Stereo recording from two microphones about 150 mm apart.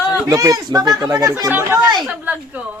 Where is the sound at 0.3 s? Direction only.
20° right (ahead or behind).